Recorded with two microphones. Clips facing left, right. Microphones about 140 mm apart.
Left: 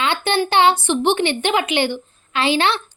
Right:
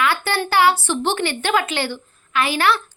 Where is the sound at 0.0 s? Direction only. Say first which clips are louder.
Left 1 dB; 20° left (ahead or behind).